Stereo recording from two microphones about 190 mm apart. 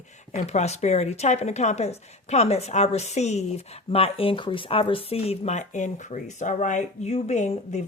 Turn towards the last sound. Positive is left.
turn(degrees=35)  # may be behind; listen again after turning